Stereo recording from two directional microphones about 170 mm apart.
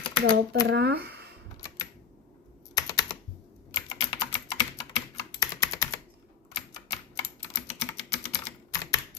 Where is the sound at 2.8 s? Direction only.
20° left (ahead or behind).